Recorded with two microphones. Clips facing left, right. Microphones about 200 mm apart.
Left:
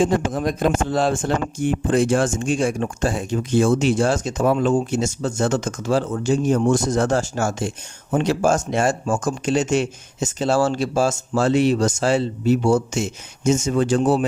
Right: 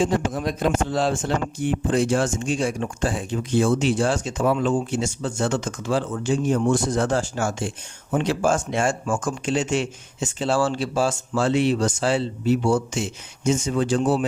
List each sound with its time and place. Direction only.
0.0 s speech: 50° left (ahead or behind)